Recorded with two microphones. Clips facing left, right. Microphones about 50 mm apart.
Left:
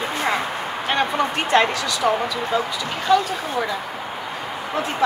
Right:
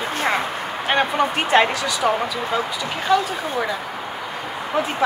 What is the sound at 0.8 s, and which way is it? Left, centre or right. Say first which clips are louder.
Speech: right 2 dB; centre.